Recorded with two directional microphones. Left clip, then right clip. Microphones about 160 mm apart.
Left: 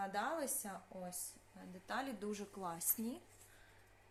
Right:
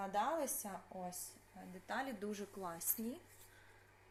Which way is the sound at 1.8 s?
10° left (ahead or behind).